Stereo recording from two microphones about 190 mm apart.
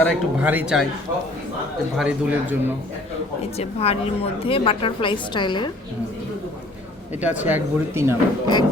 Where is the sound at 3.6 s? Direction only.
30° left (ahead or behind).